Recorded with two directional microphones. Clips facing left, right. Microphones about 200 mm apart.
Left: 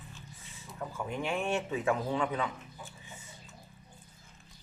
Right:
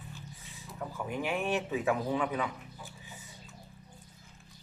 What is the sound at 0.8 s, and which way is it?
A man's voice, 5° right (ahead or behind).